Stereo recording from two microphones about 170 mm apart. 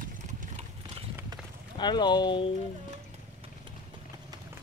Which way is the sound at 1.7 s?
25° left (ahead or behind).